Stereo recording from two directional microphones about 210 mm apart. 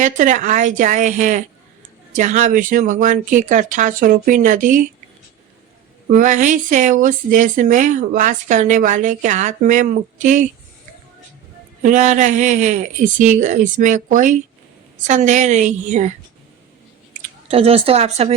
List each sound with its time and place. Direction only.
0.0 s speech: 35° right (ahead or behind)
6.1 s speech: 35° right (ahead or behind)
11.8 s speech: 35° right (ahead or behind)
17.2 s chewing: 35° right (ahead or behind)
17.5 s speech: 30° right (ahead or behind)